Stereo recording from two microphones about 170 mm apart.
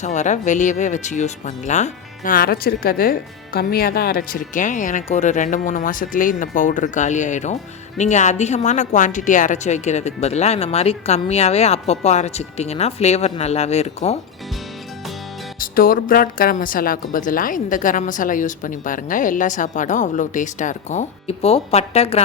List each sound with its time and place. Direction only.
0.0 s a woman's voice: 45° left (ahead or behind)
15.6 s a woman's voice: 55° left (ahead or behind); by 22.2 s 35° left (ahead or behind)